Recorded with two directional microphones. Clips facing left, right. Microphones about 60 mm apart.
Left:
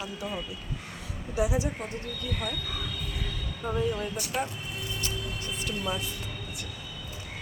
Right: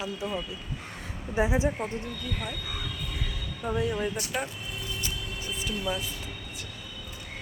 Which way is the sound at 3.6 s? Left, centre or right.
Centre.